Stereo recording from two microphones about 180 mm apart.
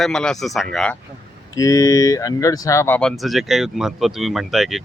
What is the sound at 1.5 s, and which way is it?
Speech, 20° left (ahead or behind).